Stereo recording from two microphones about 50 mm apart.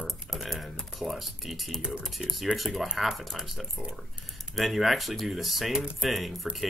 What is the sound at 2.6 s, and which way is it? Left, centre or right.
Speech, centre.